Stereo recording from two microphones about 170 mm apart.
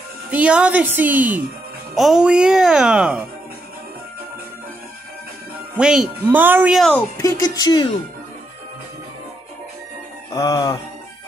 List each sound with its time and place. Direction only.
0.3 s a woman's voice: 5° right (ahead or behind)
5.8 s a woman's voice: 5° right (ahead or behind)
6.9 s speech: 15° left (ahead or behind)
10.3 s speech: 20° left (ahead or behind)